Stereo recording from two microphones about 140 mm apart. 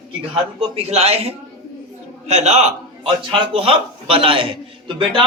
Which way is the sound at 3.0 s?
40° right (ahead or behind).